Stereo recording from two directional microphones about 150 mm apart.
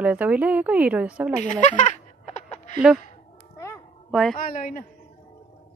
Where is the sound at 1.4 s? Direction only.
55° left (ahead or behind).